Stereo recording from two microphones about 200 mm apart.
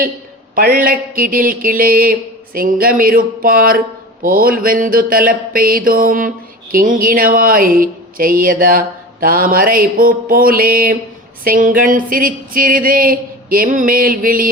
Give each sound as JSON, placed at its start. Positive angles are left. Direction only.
{"t": 0.5, "sound": "mantra", "side_deg": -45}